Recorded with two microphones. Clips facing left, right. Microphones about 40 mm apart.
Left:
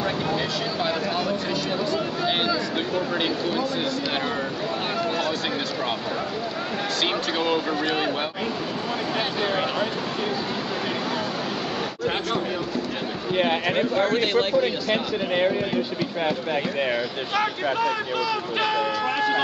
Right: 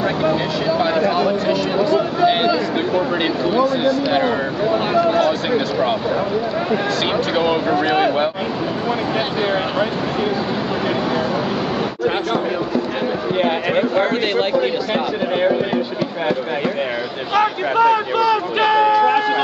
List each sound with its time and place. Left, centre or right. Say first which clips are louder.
0.3 s speech: right 7 dB; centre
1.1 s a sound: right 8 dB; centre
3.5 s speech: right 9 dB; centre
7.3 s speech: right 8 dB; centre
13.4 s speech: right 3 dB; centre
13.9 s speech: right 4 dB; right
14.9 s speech: right 5 dB; centre
17.3 s speech: right 8 dB; right
18.2 s speech: right 7 dB; right